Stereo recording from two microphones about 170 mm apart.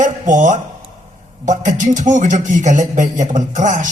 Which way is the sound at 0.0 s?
50° right (ahead or behind).